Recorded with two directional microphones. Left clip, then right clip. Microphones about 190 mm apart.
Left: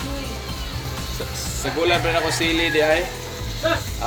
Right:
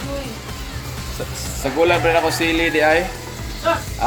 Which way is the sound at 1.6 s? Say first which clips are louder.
Right 4 dB; 50° right (ahead or behind).